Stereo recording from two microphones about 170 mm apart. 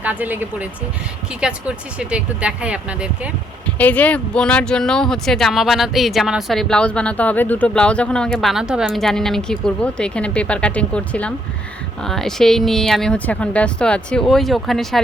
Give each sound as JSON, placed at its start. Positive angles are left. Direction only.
{"t": 0.0, "sound": "speech", "side_deg": -10}
{"t": 3.8, "sound": "speech", "side_deg": 10}